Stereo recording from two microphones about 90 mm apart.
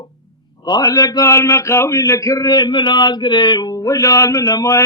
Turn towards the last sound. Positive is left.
turn(degrees=40)  # may be behind; listen again after turning